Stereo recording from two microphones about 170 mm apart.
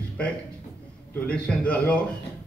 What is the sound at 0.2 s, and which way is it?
A man's voice, 5° left (ahead or behind).